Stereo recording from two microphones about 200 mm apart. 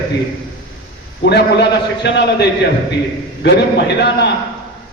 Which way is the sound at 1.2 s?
60° left (ahead or behind).